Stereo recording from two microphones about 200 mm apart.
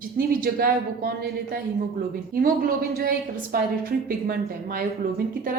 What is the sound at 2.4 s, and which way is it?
A woman's voice, 45° right (ahead or behind).